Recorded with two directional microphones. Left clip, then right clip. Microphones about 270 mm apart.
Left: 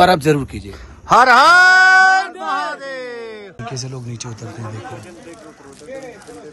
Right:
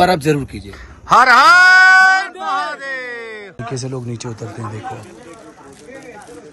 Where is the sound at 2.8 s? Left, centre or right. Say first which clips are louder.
Right 2 dB; centre.